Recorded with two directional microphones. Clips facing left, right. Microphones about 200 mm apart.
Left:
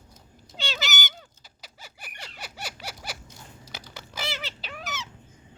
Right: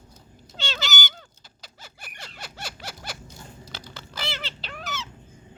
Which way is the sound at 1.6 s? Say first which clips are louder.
Even; 10° left (ahead or behind).